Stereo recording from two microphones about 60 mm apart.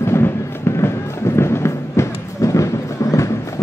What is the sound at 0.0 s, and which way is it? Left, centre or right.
Music, left.